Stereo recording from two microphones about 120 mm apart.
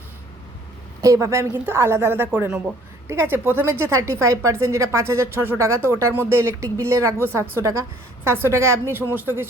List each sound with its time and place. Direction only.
1.0 s a woman's voice: 30° right (ahead or behind)